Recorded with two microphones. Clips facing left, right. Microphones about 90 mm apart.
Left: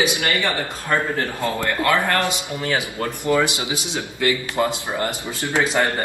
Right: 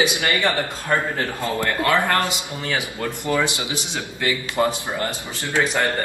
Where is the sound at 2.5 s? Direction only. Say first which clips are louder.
Left 3 dB; 20° left (ahead or behind).